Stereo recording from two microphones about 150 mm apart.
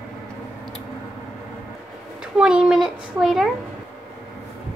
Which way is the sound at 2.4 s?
5° right (ahead or behind).